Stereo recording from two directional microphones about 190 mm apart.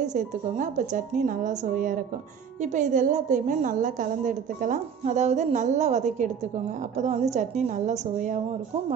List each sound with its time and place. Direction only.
0.0 s a woman's voice: 40° right (ahead or behind)